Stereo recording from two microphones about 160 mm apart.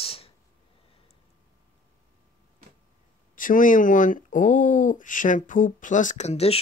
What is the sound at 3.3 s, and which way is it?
Speech, 60° left (ahead or behind).